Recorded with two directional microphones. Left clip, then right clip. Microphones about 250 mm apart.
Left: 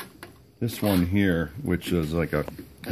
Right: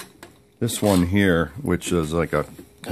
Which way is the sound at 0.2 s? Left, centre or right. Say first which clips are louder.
Right 6 dB; right.